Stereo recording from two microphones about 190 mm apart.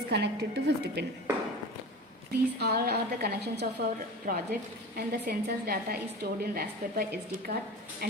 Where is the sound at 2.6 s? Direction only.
55° right (ahead or behind).